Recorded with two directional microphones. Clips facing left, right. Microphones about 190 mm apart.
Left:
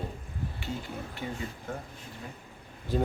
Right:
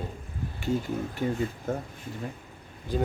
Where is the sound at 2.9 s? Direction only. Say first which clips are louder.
Right 1 dB; 5° left (ahead or behind).